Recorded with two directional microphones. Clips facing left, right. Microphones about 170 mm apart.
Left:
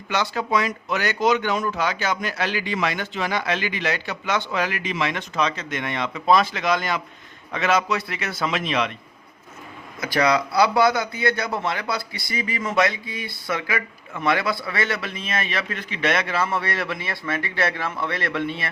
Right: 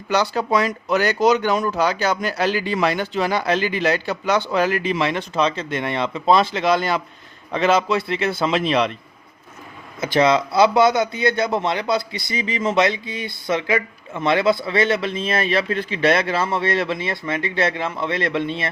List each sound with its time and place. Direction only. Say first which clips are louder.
0.1 s a man's voice: right 4 dB; 35° right (ahead or behind)
10.0 s a man's voice: right 4 dB; 25° right (ahead or behind)